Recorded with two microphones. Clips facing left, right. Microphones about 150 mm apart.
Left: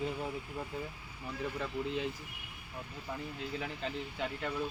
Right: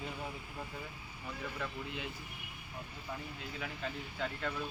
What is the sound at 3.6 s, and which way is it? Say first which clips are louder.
Speech: even; 20° left (ahead or behind).